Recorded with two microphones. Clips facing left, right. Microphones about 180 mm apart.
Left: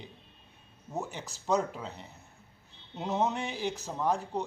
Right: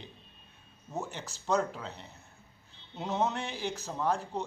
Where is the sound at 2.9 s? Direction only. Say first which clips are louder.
Left 1 dB; centre (ahead or behind).